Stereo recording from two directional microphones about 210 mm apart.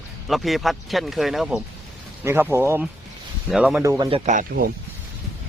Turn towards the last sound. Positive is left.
turn(degrees=-40)  # may be behind; listen again after turning